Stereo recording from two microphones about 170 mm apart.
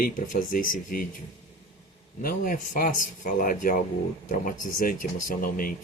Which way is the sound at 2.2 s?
55° left (ahead or behind).